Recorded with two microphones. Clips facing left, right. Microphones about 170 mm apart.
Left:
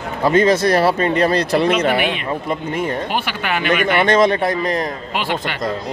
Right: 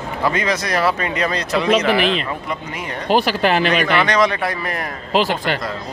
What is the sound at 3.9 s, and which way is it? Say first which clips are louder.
Speech: left 3 dB; 25° left (ahead or behind).